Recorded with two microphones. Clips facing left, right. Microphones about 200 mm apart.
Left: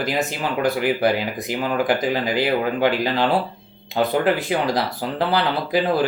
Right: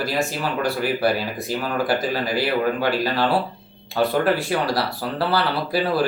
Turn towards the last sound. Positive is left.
turn(degrees=20)  # may be behind; listen again after turning